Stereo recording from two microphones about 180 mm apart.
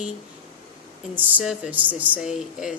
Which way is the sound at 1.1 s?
10° right (ahead or behind).